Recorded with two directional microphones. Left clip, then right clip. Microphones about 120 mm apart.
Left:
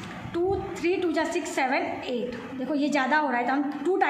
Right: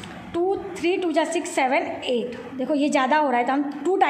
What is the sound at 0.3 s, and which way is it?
A woman's voice, 40° right (ahead or behind).